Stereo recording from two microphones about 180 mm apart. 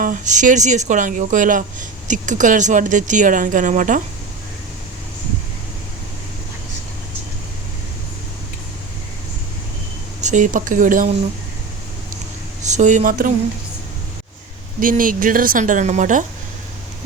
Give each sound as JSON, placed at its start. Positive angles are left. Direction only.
{"t": 0.0, "sound": "speech", "side_deg": -45}
{"t": 10.2, "sound": "speech", "side_deg": -40}
{"t": 12.6, "sound": "speech", "side_deg": -40}
{"t": 14.8, "sound": "speech", "side_deg": -50}